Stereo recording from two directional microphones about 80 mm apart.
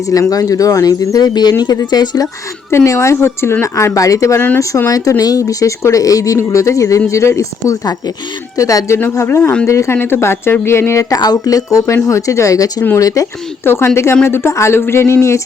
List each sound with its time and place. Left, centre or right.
0.0 s speech: left
2.6 s speech: left
11.1 s speech: left
13.7 s speech: left